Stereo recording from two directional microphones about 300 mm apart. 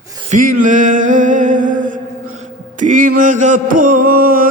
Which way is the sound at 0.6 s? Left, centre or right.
Right.